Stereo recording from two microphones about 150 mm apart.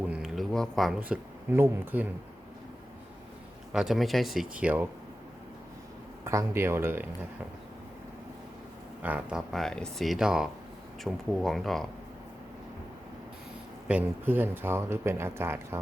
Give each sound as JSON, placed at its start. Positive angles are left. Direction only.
{"t": 0.1, "sound": "speech", "side_deg": 0}
{"t": 3.7, "sound": "speech", "side_deg": -5}
{"t": 6.2, "sound": "speech", "side_deg": -20}
{"t": 9.0, "sound": "speech", "side_deg": -10}
{"t": 13.8, "sound": "speech", "side_deg": -10}